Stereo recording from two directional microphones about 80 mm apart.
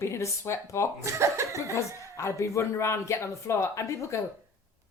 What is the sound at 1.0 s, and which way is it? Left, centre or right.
Speech, right.